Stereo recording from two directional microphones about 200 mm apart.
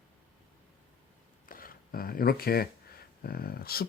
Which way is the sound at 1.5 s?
45° left (ahead or behind).